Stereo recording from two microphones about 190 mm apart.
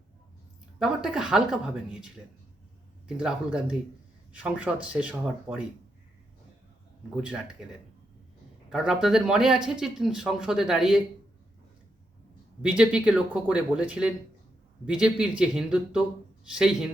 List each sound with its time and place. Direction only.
0.8 s speech: centre (ahead or behind)
7.2 s speech: 5° right (ahead or behind)
8.7 s speech: 5° right (ahead or behind)
12.6 s speech: 5° right (ahead or behind)